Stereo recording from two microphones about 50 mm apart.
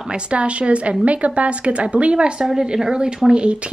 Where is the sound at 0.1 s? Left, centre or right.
Right.